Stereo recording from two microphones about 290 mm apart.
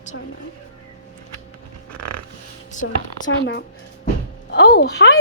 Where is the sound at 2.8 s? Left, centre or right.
Left.